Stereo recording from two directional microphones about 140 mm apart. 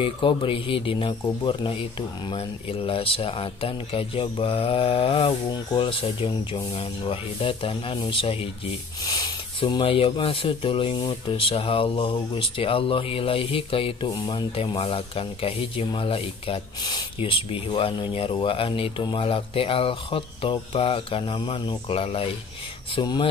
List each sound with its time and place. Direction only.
0.0 s speech: 35° left (ahead or behind)
22.9 s speech: 30° left (ahead or behind)